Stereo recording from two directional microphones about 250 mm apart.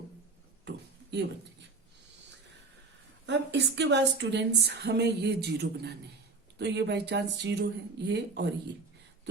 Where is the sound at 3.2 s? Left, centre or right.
Right.